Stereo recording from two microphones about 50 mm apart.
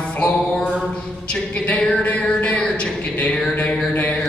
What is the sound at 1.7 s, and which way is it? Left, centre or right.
Music, left.